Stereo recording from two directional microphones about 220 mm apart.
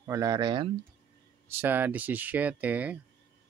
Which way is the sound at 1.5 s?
10° right (ahead or behind).